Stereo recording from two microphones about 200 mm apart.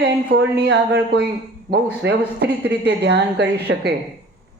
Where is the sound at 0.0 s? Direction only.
55° right (ahead or behind).